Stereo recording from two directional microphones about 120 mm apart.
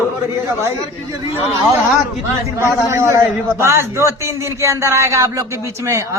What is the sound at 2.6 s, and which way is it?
Speech, 20° right (ahead or behind).